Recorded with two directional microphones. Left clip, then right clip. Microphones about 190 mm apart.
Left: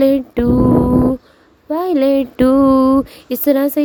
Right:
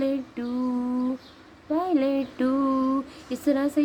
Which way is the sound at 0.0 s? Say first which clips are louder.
Left 14 dB; 60° left (ahead or behind).